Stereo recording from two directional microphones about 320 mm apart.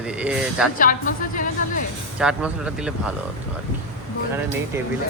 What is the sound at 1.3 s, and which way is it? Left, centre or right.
Music, left.